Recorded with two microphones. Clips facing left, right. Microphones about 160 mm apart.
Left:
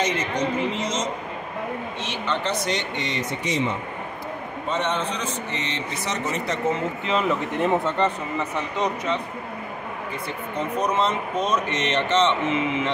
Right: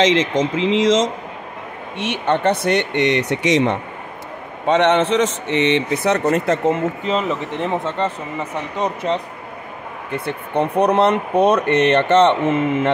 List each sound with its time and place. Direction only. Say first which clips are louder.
0.0 s speech: right 8 dB; 90° right
2.0 s a man's voice: right 11 dB; 60° right (ahead or behind)
8.0 s speech: right 1 dB; 15° right (ahead or behind)
10.1 s speech: right 10 dB; 65° right (ahead or behind)